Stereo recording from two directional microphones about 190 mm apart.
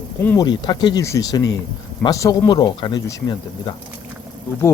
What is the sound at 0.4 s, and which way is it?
Speech, 25° left (ahead or behind).